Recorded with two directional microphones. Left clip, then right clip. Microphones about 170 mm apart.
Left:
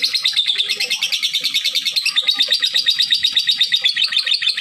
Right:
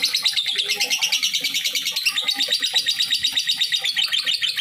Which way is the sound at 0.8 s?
15° left (ahead or behind).